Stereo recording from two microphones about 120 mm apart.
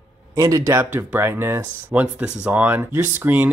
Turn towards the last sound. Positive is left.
turn(degrees=-15)  # may be behind; listen again after turning